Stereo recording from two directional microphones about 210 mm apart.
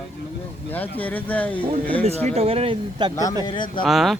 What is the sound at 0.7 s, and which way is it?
Speech, 10° left (ahead or behind).